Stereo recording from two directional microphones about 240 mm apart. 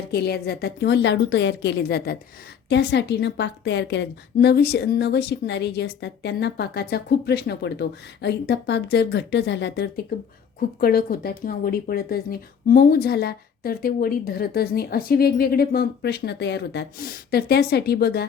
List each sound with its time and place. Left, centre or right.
0.1 s a woman's voice: left